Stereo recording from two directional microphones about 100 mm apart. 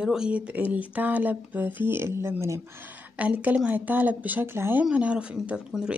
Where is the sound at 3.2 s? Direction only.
15° right (ahead or behind).